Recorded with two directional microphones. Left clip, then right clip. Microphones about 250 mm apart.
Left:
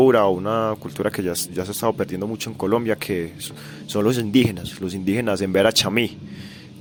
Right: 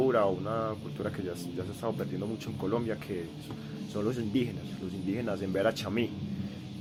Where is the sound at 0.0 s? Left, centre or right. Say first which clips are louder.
Left 11 dB; left.